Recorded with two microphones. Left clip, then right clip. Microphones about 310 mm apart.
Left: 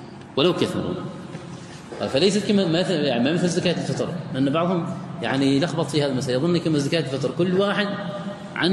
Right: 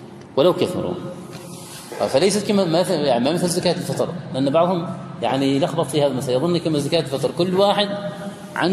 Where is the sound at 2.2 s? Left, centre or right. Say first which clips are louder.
Right 2 dB; centre.